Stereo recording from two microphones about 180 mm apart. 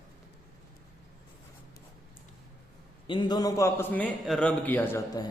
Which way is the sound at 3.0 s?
25° left (ahead or behind).